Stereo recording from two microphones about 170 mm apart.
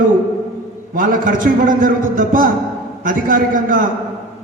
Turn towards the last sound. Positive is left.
turn(degrees=-55)  # may be behind; listen again after turning